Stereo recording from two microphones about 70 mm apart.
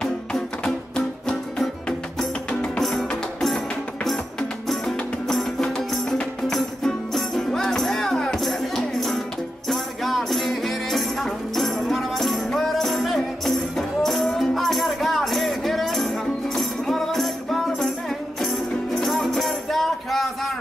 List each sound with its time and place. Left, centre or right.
0.0 s music: centre